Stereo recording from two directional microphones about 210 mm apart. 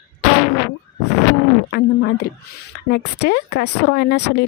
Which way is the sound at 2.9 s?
50° left (ahead or behind).